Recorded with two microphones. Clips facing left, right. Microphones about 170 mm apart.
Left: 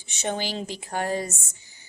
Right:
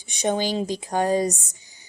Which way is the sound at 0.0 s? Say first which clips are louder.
Right 6 dB; 15° right (ahead or behind).